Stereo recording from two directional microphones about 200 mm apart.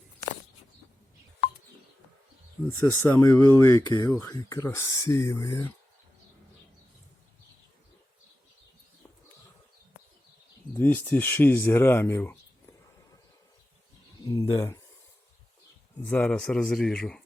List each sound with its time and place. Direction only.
2.6 s speech: 15° left (ahead or behind)
10.8 s speech: 10° left (ahead or behind)
14.3 s speech: 15° left (ahead or behind)
16.0 s speech: 5° left (ahead or behind)